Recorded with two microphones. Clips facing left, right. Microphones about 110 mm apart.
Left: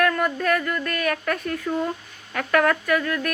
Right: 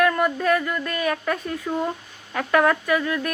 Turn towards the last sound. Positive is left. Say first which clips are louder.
# even
turn(degrees=-15)  # may be behind; listen again after turning